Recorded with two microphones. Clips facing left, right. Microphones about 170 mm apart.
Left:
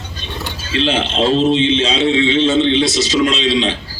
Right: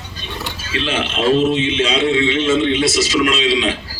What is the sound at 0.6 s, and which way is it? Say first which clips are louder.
A man's voice: left 4 dB; 30° left (ahead or behind).